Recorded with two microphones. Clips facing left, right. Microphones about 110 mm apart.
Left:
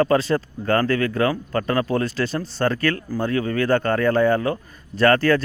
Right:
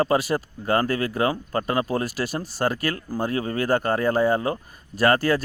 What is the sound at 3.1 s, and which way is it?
Speech, 30° right (ahead or behind).